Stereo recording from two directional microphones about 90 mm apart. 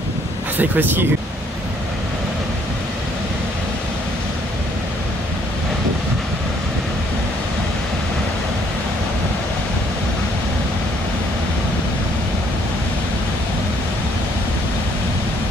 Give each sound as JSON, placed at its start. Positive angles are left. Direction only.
{"t": 0.6, "sound": "speech", "side_deg": -20}